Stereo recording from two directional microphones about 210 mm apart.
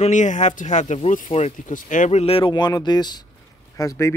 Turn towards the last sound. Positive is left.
turn(degrees=15)  # may be behind; listen again after turning